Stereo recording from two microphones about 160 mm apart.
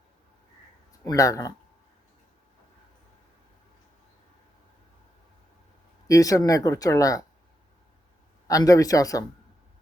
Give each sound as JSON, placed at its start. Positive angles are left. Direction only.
{"t": 1.0, "sound": "speech", "side_deg": 20}
{"t": 6.1, "sound": "speech", "side_deg": 20}
{"t": 8.4, "sound": "speech", "side_deg": 20}